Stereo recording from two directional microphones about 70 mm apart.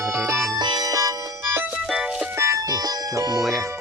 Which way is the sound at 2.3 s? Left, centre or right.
Right.